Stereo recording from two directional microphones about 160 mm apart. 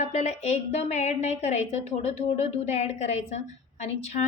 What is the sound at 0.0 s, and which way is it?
A woman's voice, 45° left (ahead or behind).